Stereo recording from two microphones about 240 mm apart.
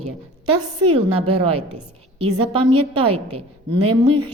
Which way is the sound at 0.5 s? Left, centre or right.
Right.